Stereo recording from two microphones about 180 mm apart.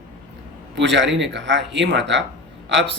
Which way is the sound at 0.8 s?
80° right.